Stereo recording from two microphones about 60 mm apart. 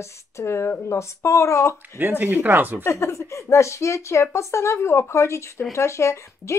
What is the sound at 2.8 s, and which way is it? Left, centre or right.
Speech, left.